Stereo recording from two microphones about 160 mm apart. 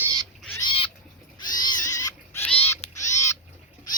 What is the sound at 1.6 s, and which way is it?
Cat, 25° left (ahead or behind).